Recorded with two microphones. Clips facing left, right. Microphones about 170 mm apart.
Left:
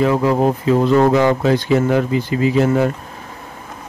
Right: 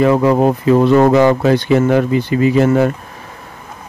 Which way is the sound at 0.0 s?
65° right (ahead or behind).